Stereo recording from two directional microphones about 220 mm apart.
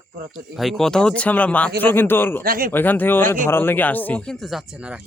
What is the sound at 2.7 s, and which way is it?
Speech, 10° left (ahead or behind).